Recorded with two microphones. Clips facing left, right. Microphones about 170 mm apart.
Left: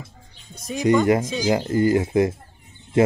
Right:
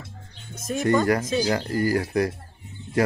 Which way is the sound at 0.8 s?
20° left (ahead or behind).